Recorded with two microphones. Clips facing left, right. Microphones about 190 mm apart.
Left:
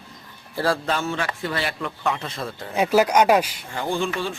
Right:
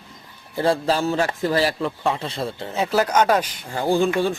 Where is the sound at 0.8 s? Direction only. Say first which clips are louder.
Right 5 dB; 35° right (ahead or behind).